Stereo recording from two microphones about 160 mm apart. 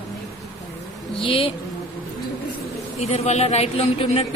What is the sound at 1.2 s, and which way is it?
Speech, 35° left (ahead or behind).